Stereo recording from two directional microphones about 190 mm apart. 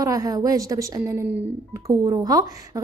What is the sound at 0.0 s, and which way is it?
Speech, 20° right (ahead or behind).